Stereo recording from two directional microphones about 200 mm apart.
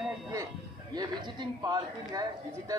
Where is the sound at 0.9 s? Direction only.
20° right (ahead or behind).